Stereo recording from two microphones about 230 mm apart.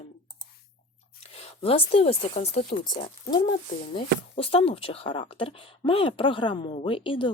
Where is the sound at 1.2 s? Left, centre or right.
Left.